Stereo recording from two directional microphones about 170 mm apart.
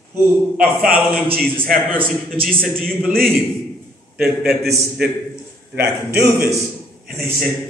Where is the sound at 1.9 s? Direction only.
10° right (ahead or behind).